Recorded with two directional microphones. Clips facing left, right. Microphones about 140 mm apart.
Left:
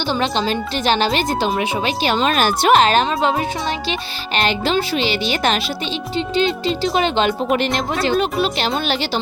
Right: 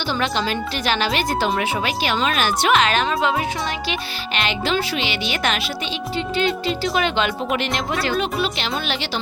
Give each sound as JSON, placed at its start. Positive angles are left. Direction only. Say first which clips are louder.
{"t": 0.1, "sound": "speech", "louder": "left 3 dB", "side_deg": 25}
{"t": 4.4, "sound": "speech", "louder": "left 4 dB", "side_deg": 35}